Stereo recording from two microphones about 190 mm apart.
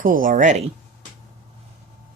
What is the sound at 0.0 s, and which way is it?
Speech, 45° right (ahead or behind).